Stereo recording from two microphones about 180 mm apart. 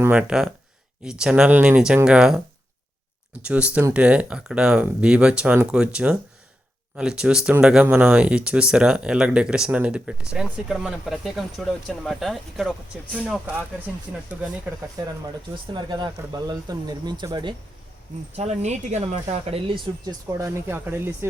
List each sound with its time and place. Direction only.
0.0 s speech: 10° right (ahead or behind)
3.4 s speech: 5° right (ahead or behind)
14.8 s speech: 15° right (ahead or behind)
18.3 s speech: 40° right (ahead or behind)
19.5 s speech: 30° right (ahead or behind)
20.7 s speech: 10° right (ahead or behind)